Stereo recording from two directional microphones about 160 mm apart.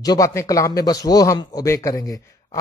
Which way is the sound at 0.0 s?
20° left (ahead or behind).